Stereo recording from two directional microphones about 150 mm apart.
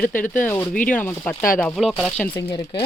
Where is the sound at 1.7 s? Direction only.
Centre (ahead or behind).